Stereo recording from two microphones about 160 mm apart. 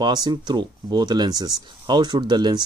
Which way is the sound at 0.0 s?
25° right (ahead or behind).